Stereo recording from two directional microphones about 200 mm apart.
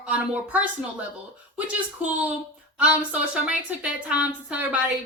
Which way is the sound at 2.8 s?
5° right (ahead or behind).